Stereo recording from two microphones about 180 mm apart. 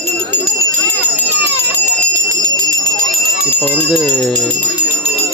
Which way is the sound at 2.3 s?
20° right (ahead or behind).